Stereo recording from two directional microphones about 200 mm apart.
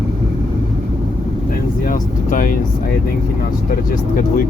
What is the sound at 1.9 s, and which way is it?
Speech, 45° left (ahead or behind).